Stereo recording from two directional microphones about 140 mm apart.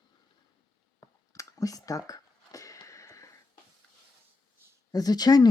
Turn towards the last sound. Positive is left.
turn(degrees=30)  # may be behind; listen again after turning